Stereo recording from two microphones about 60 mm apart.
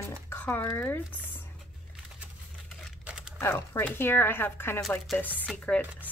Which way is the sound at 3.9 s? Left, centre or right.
Left.